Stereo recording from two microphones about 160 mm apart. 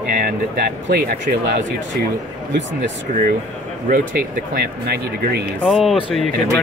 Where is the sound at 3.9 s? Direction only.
75° right (ahead or behind).